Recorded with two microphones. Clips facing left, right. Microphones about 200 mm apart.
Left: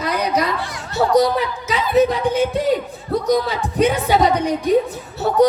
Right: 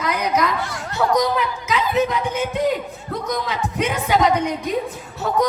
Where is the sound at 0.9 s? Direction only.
35° left (ahead or behind).